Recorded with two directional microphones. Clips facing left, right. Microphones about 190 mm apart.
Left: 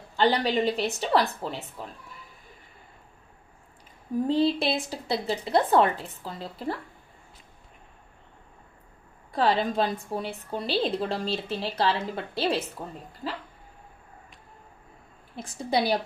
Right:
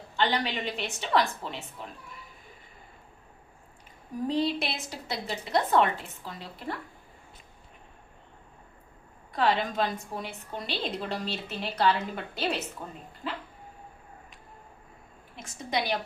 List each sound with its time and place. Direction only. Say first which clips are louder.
0.2 s a woman's voice: left 6 dB; 35° left (ahead or behind)
4.3 s a woman's voice: left 4 dB; 30° left (ahead or behind)
9.3 s a woman's voice: left 3 dB; 35° left (ahead or behind)
15.4 s a woman's voice: left 5 dB; 35° left (ahead or behind)